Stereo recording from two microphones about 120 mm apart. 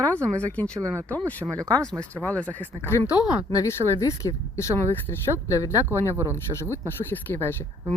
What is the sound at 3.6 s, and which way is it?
Speech, 25° left (ahead or behind).